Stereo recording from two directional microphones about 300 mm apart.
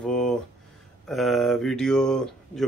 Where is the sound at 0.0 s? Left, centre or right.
Centre.